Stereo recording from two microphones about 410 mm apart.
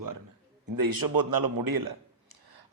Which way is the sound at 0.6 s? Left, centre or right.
Right.